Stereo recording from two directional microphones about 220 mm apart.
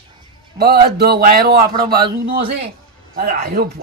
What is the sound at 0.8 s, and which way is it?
A man's voice, 45° right (ahead or behind).